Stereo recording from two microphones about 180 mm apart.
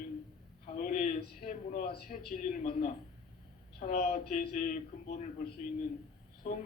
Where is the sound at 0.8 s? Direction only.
45° left (ahead or behind).